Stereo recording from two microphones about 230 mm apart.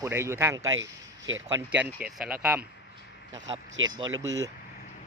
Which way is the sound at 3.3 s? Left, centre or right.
Centre.